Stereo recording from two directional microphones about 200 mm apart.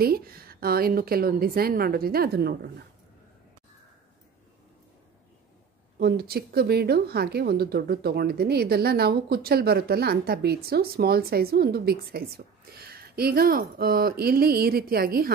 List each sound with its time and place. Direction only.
0.0 s a woman's voice: 50° right (ahead or behind)
5.9 s a woman's voice: 50° right (ahead or behind)